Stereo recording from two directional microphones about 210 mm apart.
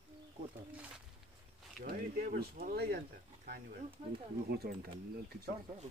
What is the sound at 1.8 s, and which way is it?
Speech, 40° right (ahead or behind).